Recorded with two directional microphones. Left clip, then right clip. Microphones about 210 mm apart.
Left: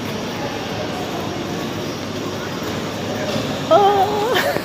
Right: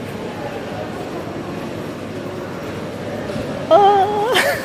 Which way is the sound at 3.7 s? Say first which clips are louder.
Right 2 dB; 20° right (ahead or behind).